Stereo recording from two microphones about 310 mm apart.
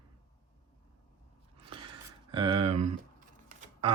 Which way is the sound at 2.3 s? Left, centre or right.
Centre.